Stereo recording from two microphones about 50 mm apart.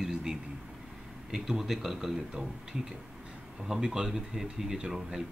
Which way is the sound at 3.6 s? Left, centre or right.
Centre.